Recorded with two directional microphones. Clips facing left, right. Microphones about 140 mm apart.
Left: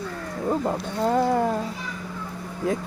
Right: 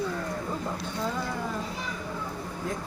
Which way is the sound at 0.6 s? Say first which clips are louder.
Left 7 dB; 60° left (ahead or behind).